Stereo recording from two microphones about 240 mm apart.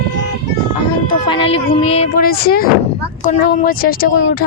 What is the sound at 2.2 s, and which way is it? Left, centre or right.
Speech, left.